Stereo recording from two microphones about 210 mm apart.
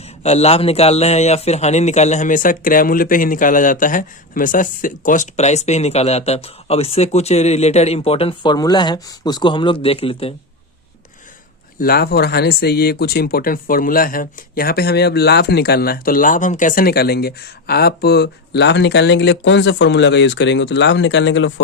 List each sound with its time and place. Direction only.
0.0 s a man's voice: 30° left (ahead or behind)
11.8 s speech: 45° left (ahead or behind)